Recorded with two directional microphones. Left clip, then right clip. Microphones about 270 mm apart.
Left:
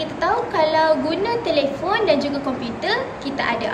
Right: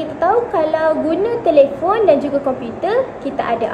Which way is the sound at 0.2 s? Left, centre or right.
Centre.